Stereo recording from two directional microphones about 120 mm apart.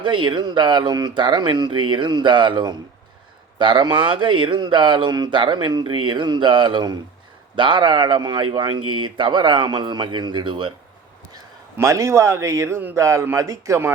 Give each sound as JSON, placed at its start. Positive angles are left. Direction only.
{"t": 0.0, "sound": "speech", "side_deg": -40}
{"t": 11.8, "sound": "speech", "side_deg": -25}